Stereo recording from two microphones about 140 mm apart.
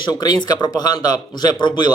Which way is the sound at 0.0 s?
30° left (ahead or behind).